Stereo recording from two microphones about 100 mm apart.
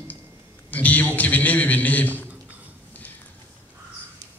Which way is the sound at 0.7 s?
15° left (ahead or behind).